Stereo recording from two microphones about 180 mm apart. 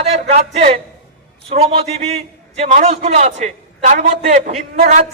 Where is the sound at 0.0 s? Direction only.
35° right (ahead or behind).